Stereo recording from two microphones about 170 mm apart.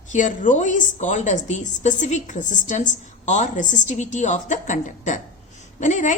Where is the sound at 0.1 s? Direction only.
50° left (ahead or behind).